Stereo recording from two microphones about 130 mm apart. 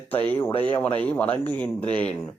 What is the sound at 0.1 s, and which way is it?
Speech, 15° left (ahead or behind).